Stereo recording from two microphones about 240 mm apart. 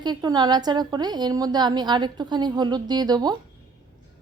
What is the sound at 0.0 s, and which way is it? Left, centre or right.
A woman's voice, centre.